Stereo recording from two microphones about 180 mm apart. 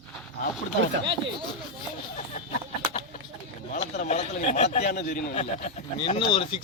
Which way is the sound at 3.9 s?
40° left (ahead or behind).